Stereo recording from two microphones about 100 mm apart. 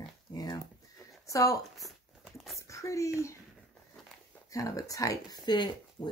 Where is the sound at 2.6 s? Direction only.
30° left (ahead or behind).